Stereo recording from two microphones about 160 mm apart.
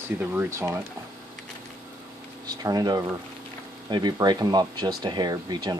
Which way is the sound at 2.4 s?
25° right (ahead or behind).